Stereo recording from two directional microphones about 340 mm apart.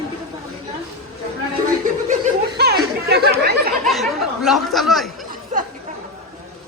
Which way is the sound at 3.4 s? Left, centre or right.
Right.